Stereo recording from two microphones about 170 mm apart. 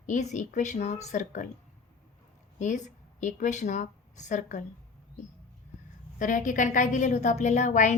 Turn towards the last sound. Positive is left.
turn(degrees=45)  # may be behind; listen again after turning